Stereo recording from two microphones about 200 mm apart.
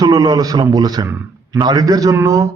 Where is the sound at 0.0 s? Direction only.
20° right (ahead or behind).